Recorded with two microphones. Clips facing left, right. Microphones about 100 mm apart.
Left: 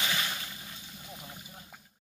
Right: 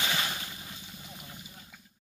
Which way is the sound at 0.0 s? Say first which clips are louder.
Right 1 dB; 25° right (ahead or behind).